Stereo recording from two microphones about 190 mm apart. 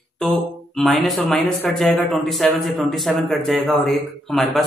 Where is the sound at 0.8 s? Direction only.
Centre (ahead or behind).